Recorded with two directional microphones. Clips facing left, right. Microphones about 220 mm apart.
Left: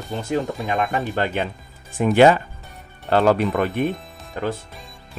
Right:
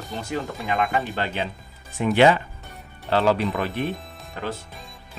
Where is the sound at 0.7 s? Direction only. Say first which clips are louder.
Left 1 dB; 50° left (ahead or behind).